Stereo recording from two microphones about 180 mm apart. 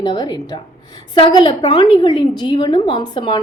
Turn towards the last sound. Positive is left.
turn(degrees=25)  # may be behind; listen again after turning